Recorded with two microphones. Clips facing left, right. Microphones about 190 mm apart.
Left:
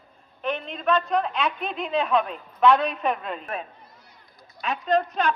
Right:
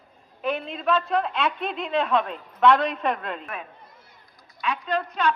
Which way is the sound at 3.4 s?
35° left (ahead or behind).